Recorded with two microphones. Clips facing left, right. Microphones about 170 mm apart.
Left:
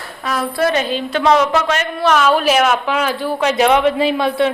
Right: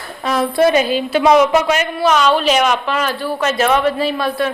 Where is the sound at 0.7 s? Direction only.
10° right (ahead or behind).